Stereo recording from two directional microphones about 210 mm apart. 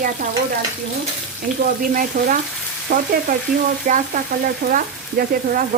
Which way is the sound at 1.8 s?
40° right (ahead or behind).